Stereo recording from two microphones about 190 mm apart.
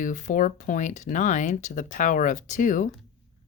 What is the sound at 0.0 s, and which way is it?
Speech, 40° left (ahead or behind).